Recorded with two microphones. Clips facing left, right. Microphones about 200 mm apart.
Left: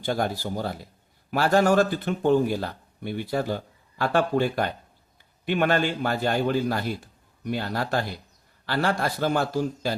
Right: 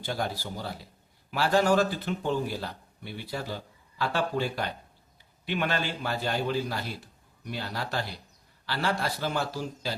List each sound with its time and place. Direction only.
0.0 s speech: 50° left (ahead or behind)